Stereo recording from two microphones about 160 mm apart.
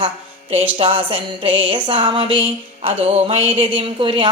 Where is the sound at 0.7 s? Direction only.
35° right (ahead or behind).